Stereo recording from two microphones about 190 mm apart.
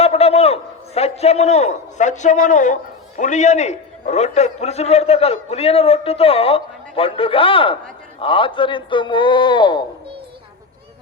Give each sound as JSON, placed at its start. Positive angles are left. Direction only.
{"t": 0.0, "sound": "a man's voice", "side_deg": 30}